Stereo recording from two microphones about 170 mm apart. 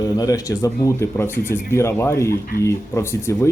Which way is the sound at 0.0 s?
20° left (ahead or behind).